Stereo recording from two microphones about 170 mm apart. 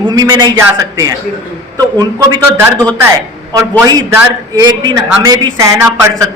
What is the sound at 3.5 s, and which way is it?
A man's voice, 20° right (ahead or behind).